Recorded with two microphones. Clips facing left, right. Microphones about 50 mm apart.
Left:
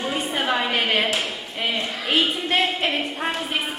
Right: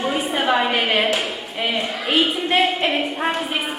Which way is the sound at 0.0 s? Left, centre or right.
Centre.